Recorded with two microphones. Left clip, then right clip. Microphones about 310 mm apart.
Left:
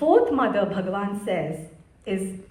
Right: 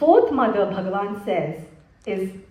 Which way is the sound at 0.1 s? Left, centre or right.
Right.